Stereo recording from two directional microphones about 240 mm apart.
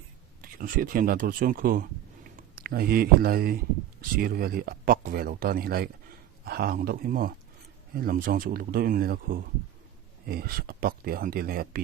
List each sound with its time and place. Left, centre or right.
0.4 s speech: right